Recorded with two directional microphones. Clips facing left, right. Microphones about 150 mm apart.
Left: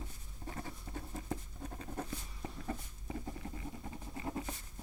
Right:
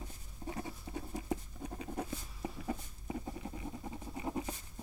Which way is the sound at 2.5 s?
5° right (ahead or behind).